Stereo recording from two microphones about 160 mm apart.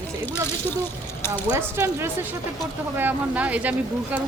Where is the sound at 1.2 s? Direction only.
15° left (ahead or behind).